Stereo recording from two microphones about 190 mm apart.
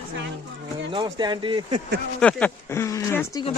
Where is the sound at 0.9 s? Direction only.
25° right (ahead or behind).